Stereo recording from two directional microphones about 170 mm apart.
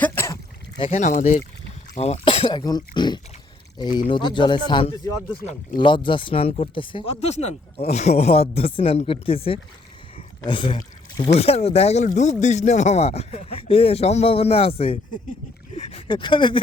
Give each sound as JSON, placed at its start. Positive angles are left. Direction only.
{"t": 0.0, "sound": "rowboat", "side_deg": 15}
{"t": 0.8, "sound": "speech", "side_deg": 40}
{"t": 10.2, "sound": "pour", "side_deg": 30}
{"t": 11.3, "sound": "speech", "side_deg": 35}